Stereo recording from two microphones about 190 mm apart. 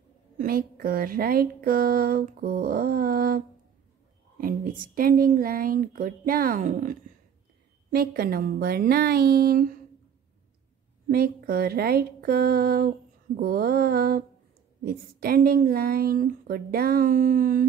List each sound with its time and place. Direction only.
0.4 s speech: 50° right (ahead or behind)
7.9 s speech: 55° right (ahead or behind)
11.1 s speech: 55° right (ahead or behind)